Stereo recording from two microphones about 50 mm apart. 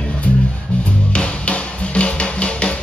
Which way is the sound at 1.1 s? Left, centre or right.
Left.